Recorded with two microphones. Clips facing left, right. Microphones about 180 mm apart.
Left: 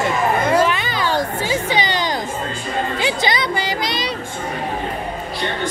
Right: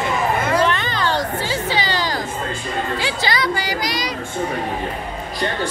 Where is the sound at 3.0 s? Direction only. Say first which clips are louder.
Left 2 dB; 20° left (ahead or behind).